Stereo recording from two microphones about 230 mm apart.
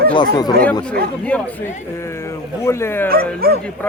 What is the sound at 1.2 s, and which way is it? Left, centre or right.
Speech, centre.